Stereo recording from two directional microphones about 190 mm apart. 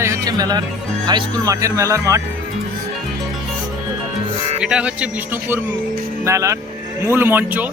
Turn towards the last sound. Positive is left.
turn(degrees=-10)  # may be behind; listen again after turning